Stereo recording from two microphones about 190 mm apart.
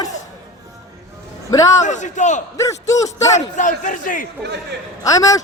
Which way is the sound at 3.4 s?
40° left (ahead or behind).